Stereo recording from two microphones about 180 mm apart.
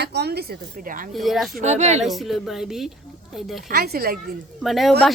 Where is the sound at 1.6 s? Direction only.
40° right (ahead or behind).